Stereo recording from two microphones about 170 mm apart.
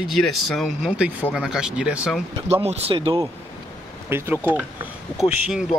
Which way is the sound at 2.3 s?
35° right (ahead or behind).